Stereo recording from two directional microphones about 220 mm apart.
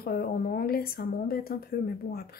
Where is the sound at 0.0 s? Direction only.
45° left (ahead or behind).